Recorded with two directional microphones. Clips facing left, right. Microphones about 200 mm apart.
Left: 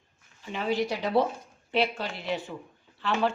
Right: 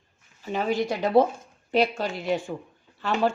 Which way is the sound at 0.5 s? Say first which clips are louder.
Right 3 dB; 45° right (ahead or behind).